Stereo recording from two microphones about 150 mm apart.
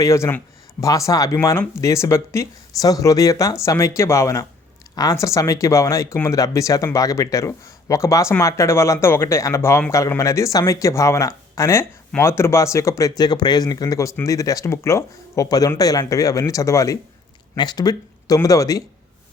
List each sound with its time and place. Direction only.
0.0 s speech: 20° left (ahead or behind)